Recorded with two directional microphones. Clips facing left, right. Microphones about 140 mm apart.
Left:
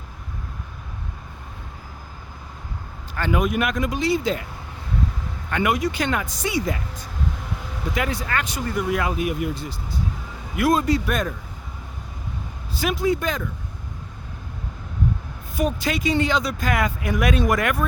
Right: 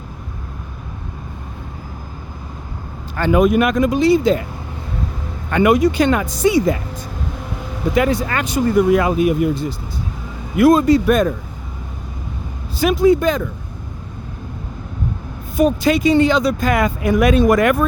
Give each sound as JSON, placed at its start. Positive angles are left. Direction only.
{"t": 3.3, "sound": "speech", "side_deg": -30}
{"t": 5.5, "sound": "speech", "side_deg": -35}
{"t": 7.9, "sound": "speech", "side_deg": -25}
{"t": 8.8, "sound": "speech", "side_deg": -25}
{"t": 12.9, "sound": "speech", "side_deg": -25}
{"t": 15.5, "sound": "speech", "side_deg": -25}